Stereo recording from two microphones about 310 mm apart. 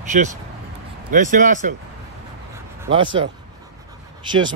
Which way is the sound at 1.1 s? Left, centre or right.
Right.